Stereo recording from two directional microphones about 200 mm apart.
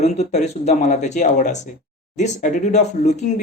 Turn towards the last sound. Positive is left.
turn(degrees=35)  # may be behind; listen again after turning